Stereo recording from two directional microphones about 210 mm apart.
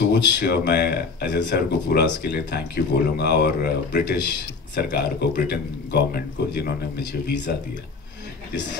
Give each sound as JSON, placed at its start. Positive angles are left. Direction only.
{"t": 0.1, "sound": "speech", "side_deg": 55}